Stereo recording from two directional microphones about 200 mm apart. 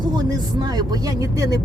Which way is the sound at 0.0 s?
20° right (ahead or behind).